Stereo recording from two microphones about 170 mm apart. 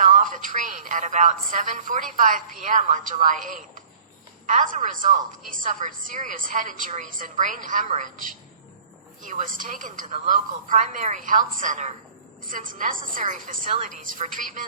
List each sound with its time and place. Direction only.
0.0 s a woman's voice: 50° right (ahead or behind)